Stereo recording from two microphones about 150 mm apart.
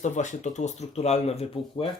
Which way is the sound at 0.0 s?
55° left (ahead or behind).